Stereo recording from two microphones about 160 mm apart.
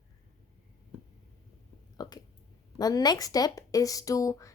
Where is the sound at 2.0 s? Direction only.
25° left (ahead or behind).